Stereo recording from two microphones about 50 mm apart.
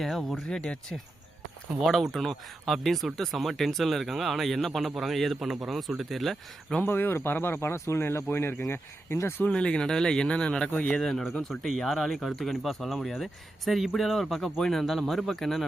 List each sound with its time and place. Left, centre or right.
0.0 s speech: centre
0.4 s speech: centre
1.8 s speech: centre
6.8 s speech: left
7.9 s speech: left
9.5 s speech: centre
10.7 s a man's voice: left
10.9 s speech: centre
11.7 s speech: centre